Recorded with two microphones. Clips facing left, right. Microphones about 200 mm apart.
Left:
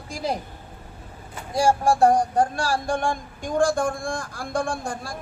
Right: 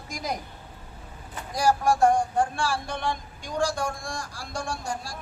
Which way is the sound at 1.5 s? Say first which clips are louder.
Left 3 dB; 30° left (ahead or behind).